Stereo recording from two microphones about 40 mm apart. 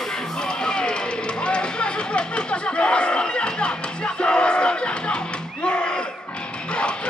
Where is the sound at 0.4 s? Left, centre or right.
Left.